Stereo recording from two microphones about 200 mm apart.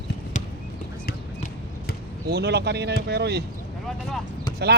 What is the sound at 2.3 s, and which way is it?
Speech, 55° right (ahead or behind).